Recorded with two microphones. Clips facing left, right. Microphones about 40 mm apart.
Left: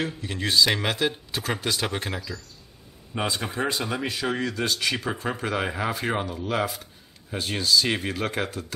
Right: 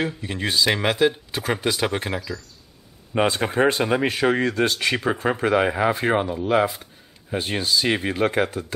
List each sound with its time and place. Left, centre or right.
0.0 s speech: centre
3.2 s speech: right
5.9 s speech: right